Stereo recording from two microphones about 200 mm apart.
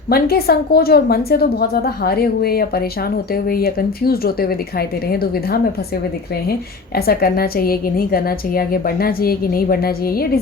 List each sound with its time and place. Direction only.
0.1 s a woman's voice: 50° left (ahead or behind)